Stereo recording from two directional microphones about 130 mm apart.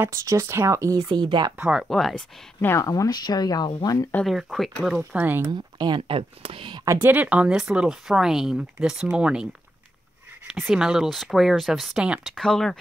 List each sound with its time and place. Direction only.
0.0 s speech: 20° right (ahead or behind)
1.6 s speech: 5° right (ahead or behind)
2.6 s speech: 20° left (ahead or behind)
4.3 s speech: centre (ahead or behind)
5.1 s speech: 15° right (ahead or behind)
5.5 s speech: 35° right (ahead or behind)
6.9 s speech: 15° right (ahead or behind)
10.7 s speech: 5° right (ahead or behind)